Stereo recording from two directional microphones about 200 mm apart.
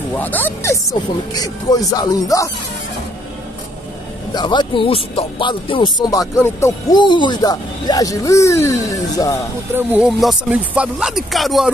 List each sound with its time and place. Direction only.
0.1 s speech: 10° left (ahead or behind)
4.3 s speech: 20° left (ahead or behind)
9.8 s speech: 5° right (ahead or behind)